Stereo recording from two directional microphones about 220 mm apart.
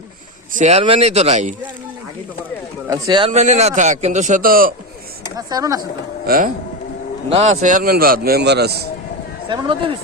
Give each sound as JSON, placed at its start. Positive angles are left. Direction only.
{"t": 0.5, "sound": "speech", "side_deg": -30}
{"t": 2.8, "sound": "a man's voice", "side_deg": -15}
{"t": 5.4, "sound": "speech", "side_deg": -15}
{"t": 6.2, "sound": "speech", "side_deg": -40}
{"t": 7.3, "sound": "a man's voice", "side_deg": -30}
{"t": 9.5, "sound": "speech", "side_deg": -25}